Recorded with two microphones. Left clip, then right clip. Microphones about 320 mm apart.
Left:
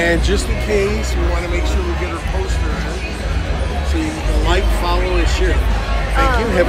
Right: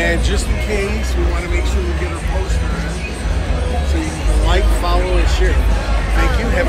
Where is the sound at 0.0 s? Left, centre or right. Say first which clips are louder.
Left 2 dB; left.